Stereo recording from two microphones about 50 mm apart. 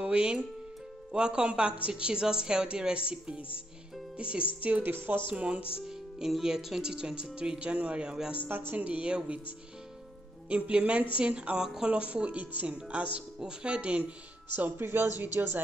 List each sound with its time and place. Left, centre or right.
0.0 s a woman's voice: centre
4.9 s speech: right
5.3 s a woman's voice: right
5.8 s a woman's voice: centre
8.4 s speech: right
8.7 s a woman's voice: right
10.5 s a woman's voice: right
11.9 s a woman's voice: right
14.5 s speech: right